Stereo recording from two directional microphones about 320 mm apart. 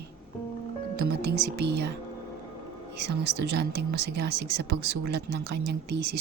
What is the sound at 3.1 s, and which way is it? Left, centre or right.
Speech, right.